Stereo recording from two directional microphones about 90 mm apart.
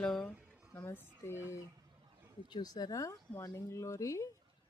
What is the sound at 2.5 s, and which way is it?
Speech, 50° left (ahead or behind).